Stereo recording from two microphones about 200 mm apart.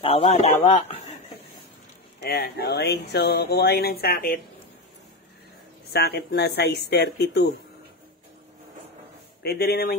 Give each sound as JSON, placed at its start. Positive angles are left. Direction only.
{"t": 0.0, "sound": "speech", "side_deg": 30}
{"t": 2.2, "sound": "speech", "side_deg": 50}
{"t": 5.9, "sound": "speech", "side_deg": 55}
{"t": 9.4, "sound": "speech", "side_deg": 55}